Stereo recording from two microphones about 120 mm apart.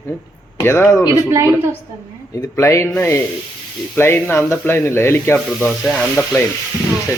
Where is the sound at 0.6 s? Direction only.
20° left (ahead or behind).